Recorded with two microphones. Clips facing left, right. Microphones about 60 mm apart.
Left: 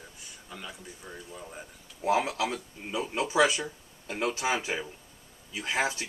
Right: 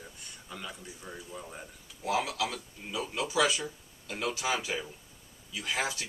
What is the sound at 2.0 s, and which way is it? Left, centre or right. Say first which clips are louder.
Speech: left 4 dB; left.